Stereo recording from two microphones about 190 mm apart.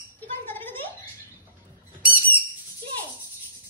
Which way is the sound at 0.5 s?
10° left (ahead or behind).